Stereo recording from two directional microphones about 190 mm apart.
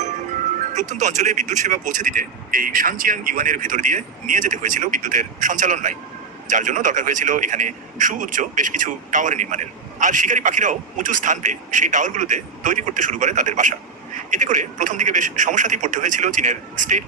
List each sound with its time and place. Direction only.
0.7 s a man's voice: 40° right (ahead or behind)